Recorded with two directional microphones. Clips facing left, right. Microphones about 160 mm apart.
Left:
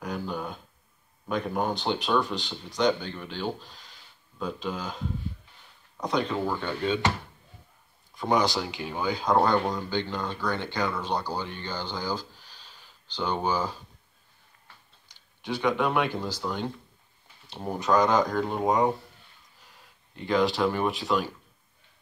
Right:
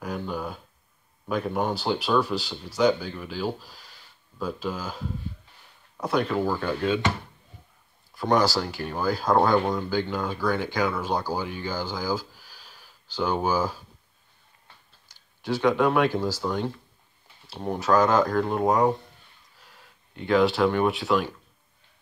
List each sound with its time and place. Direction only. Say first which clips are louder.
0.0 s speech: right 1 dB; 5° right (ahead or behind)
8.2 s speech: right 3 dB; 5° right (ahead or behind)
15.0 s speech: right 4 dB; 10° right (ahead or behind)
20.2 s speech: right 3 dB; centre (ahead or behind)